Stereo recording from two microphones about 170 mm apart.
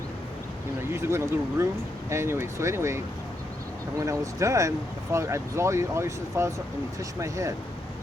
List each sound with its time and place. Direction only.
0.8 s speech: 15° right (ahead or behind)